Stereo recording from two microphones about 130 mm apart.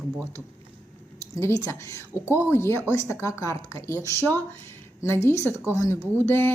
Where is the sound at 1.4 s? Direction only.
20° left (ahead or behind).